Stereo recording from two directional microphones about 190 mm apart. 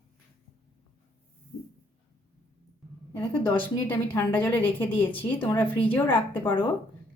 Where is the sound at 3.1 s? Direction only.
10° left (ahead or behind).